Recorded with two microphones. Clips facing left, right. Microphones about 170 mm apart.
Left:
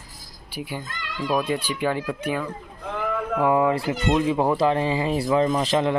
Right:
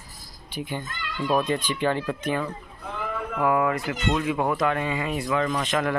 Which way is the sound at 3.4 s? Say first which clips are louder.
Left 2 dB; 25° left (ahead or behind).